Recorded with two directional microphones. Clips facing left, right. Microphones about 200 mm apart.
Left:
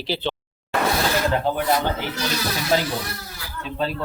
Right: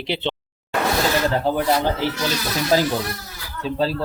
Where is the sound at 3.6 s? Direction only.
35° right (ahead or behind).